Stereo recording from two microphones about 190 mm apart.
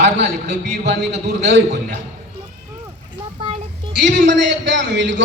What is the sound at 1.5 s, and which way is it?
Speech, 65° right (ahead or behind).